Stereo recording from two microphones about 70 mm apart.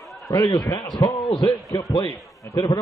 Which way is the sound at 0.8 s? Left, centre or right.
Left.